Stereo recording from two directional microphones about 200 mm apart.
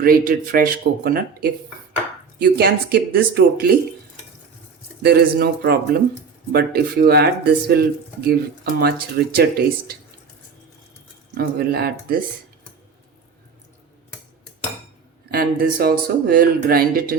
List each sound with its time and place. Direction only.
0.0 s speech: 45° right (ahead or behind)
5.0 s speech: 50° right (ahead or behind)
11.3 s speech: 50° right (ahead or behind)
15.3 s speech: 45° right (ahead or behind)